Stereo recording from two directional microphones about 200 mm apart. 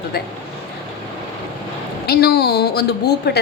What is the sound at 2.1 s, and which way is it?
A woman's voice, 50° left (ahead or behind).